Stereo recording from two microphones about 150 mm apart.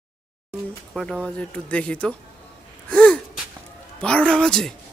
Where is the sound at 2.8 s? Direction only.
10° left (ahead or behind).